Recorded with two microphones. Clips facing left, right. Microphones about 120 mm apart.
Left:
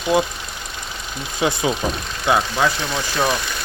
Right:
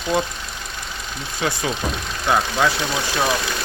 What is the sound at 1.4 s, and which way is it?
Speech, 15° left (ahead or behind).